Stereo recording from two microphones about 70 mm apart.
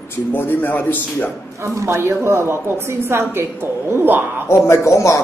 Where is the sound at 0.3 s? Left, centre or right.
Left.